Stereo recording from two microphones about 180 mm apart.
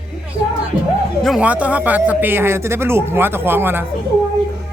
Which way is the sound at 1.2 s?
5° right (ahead or behind).